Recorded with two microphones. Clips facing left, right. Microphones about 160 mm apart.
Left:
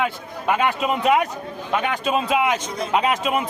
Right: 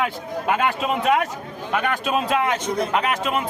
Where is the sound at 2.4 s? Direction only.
15° left (ahead or behind).